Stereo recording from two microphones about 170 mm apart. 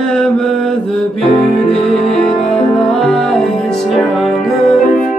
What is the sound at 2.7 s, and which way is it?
Music, 5° left (ahead or behind).